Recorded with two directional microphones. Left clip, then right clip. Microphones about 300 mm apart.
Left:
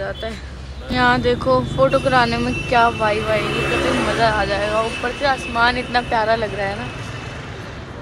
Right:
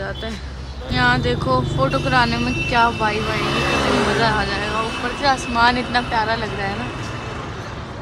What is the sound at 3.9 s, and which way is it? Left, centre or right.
Speech, right.